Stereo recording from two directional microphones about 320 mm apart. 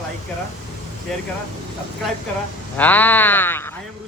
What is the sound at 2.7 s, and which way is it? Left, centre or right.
Speech, centre.